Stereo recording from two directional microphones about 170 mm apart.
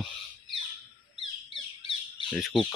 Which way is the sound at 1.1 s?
30° left (ahead or behind).